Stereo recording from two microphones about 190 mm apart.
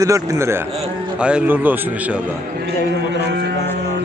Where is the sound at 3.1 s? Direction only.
60° right (ahead or behind).